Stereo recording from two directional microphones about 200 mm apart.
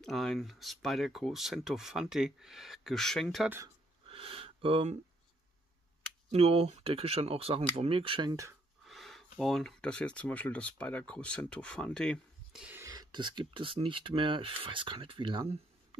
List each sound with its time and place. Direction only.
0.0 s speech: centre (ahead or behind)
3.4 s speech: 10° right (ahead or behind)
4.1 s a sound: 30° right (ahead or behind)
6.3 s speech: 30° right (ahead or behind)
8.8 s speech: centre (ahead or behind); by 16.0 s 30° right (ahead or behind)